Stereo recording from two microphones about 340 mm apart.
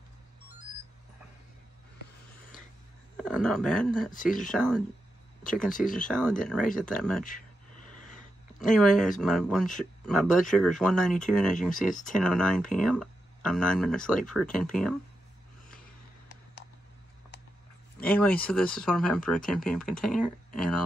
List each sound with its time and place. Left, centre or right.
3.2 s speech: centre
4.1 s speech: left
4.4 s speech: centre
5.7 s speech: left
6.0 s speech: centre
8.6 s speech: centre
18.0 s speech: centre